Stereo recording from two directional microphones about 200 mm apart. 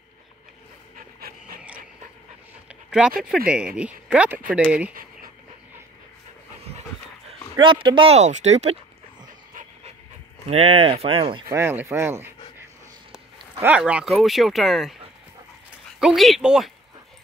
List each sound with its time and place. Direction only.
0.9 s pant: 45° right (ahead or behind)
2.7 s speech: 5° right (ahead or behind)
7.5 s speech: 25° right (ahead or behind)
9.5 s dog: 40° right (ahead or behind)
10.5 s speech: 30° right (ahead or behind)
11.5 s speech: 10° right (ahead or behind)
16.0 s speech: centre (ahead or behind)